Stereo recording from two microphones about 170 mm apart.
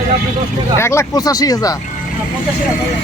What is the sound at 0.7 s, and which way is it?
Speech, 15° left (ahead or behind).